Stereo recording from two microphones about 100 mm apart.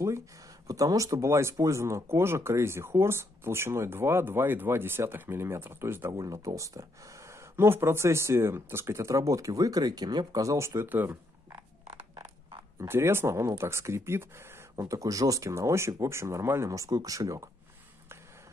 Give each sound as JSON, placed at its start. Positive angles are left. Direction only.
{"t": 0.7, "sound": "speech", "side_deg": -35}
{"t": 6.1, "sound": "speech", "side_deg": -35}
{"t": 12.8, "sound": "speech", "side_deg": -25}